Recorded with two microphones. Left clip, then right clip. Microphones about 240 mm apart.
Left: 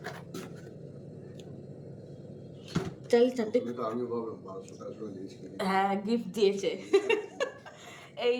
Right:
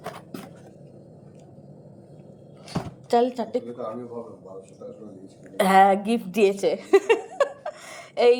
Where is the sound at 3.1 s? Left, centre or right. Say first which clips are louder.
Right 3 dB; centre.